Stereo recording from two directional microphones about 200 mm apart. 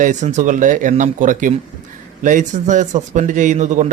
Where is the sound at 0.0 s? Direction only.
40° right (ahead or behind).